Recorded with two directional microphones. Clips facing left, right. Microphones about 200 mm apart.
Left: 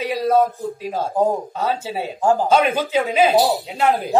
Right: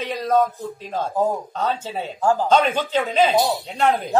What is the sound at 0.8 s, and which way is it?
Speech, 10° left (ahead or behind).